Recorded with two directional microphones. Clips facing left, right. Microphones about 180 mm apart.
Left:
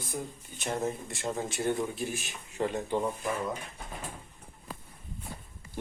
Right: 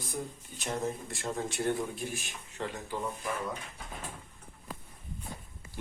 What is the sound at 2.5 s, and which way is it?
Speech, 20° left (ahead or behind).